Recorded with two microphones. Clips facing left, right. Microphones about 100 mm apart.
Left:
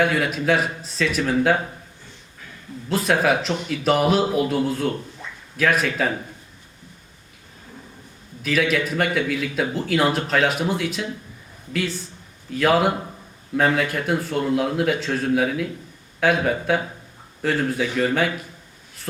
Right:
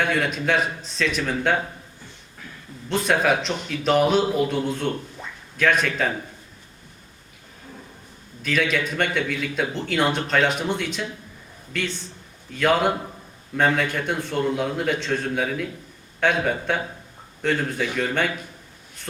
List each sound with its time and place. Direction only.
0.0 s speech: 5° left (ahead or behind)
2.9 s speech: centre (ahead or behind)
8.4 s speech: 5° left (ahead or behind)